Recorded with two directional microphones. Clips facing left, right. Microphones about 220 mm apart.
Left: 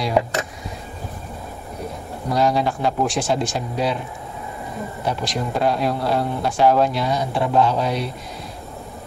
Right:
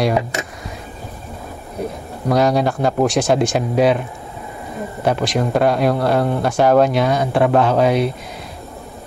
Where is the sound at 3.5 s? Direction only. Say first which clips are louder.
Right 8 dB; 60° right (ahead or behind).